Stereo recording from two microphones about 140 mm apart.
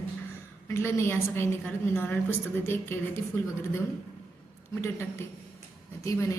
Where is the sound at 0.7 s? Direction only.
20° left (ahead or behind).